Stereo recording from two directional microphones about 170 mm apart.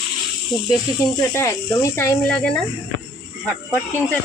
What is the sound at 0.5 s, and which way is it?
Speech, centre (ahead or behind).